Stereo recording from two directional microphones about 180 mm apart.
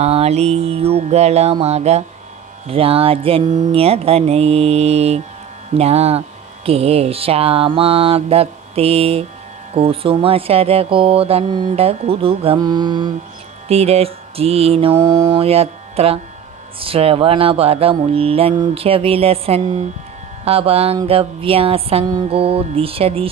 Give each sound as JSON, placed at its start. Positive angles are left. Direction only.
{"t": 0.0, "sound": "mantra", "side_deg": -35}